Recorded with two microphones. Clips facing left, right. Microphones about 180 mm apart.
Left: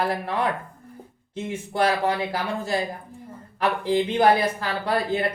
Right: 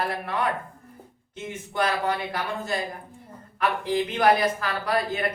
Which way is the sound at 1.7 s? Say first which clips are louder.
Left 3 dB; 30° left (ahead or behind).